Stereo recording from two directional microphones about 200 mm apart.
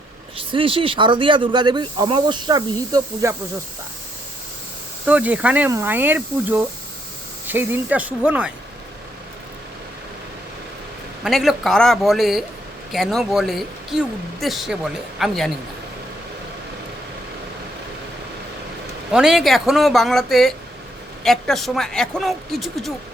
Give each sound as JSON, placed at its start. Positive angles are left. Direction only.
{"t": 0.3, "sound": "speech", "side_deg": -25}
{"t": 5.0, "sound": "speech", "side_deg": -10}
{"t": 11.2, "sound": "speech", "side_deg": 0}
{"t": 19.1, "sound": "speech", "side_deg": 0}